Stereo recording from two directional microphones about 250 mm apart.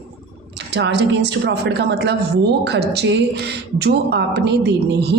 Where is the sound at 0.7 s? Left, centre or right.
Right.